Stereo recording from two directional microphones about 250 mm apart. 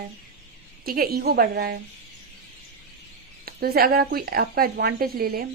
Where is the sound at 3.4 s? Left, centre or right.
Right.